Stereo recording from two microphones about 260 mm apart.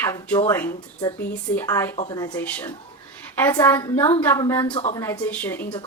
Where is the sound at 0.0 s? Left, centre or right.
Centre.